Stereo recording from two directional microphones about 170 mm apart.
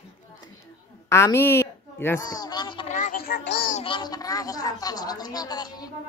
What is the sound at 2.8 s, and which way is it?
Synthetic singing, 45° left (ahead or behind).